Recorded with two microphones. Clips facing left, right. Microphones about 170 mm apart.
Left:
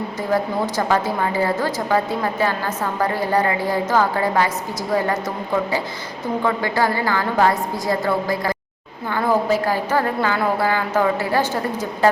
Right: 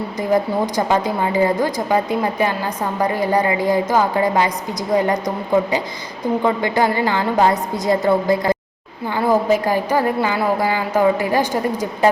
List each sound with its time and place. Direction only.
0.2 s a woman's voice: 15° right (ahead or behind)
6.4 s a woman's voice: 20° right (ahead or behind)